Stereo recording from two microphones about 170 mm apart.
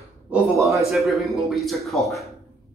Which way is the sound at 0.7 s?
Centre (ahead or behind).